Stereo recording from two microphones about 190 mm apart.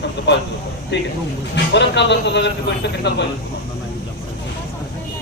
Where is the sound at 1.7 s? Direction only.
65° left (ahead or behind).